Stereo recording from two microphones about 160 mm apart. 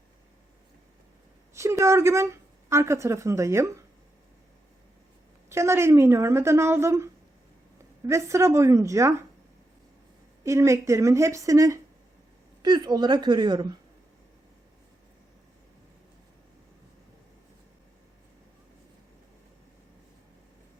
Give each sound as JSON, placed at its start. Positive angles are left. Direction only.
{"t": 1.5, "sound": "a woman's voice", "side_deg": -15}
{"t": 5.5, "sound": "a woman's voice", "side_deg": -15}
{"t": 10.4, "sound": "a woman's voice", "side_deg": -20}